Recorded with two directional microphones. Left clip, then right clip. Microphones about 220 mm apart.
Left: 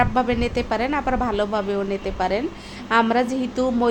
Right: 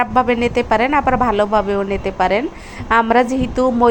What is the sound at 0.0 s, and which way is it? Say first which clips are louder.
A woman's voice: right 5 dB; 15° right (ahead or behind).